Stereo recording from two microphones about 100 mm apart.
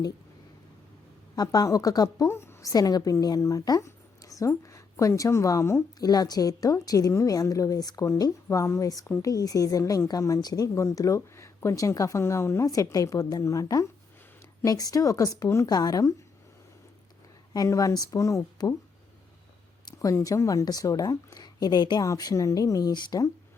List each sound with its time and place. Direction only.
1.4 s speech: 40° left (ahead or behind)
2.0 s a woman's voice: 25° left (ahead or behind)
6.0 s a woman's voice: 40° left (ahead or behind); by 9.3 s 25° left (ahead or behind)
9.3 s speech: 35° left (ahead or behind)
17.5 s speech: 35° left (ahead or behind)
20.0 s speech: 35° left (ahead or behind)